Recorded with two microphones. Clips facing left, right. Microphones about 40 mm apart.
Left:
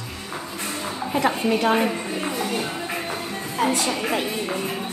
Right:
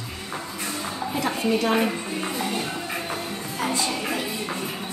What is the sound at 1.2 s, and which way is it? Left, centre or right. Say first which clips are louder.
Speech: left 2 dB; left.